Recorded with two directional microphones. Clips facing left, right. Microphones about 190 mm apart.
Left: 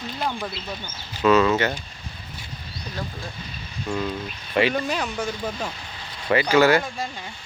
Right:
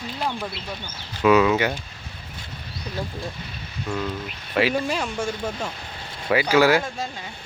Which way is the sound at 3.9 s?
5° right (ahead or behind).